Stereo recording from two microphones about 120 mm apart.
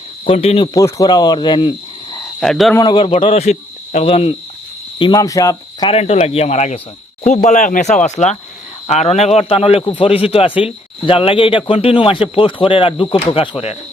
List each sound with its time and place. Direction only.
0.3 s a man's voice: 55° left (ahead or behind)
0.7 s speech: 25° left (ahead or behind)
2.4 s speech: centre (ahead or behind)
2.8 s speech: 40° left (ahead or behind)
3.1 s speech: 60° left (ahead or behind)
4.9 s speech: 40° left (ahead or behind)
5.2 s speech: 30° left (ahead or behind)
5.8 s a man's voice: 55° left (ahead or behind)
7.3 s speech: 90° left
8.0 s a man's voice: 75° left (ahead or behind); by 13.7 s 50° left (ahead or behind)